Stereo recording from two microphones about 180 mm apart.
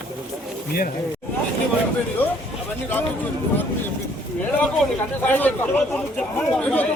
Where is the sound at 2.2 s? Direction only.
10° left (ahead or behind).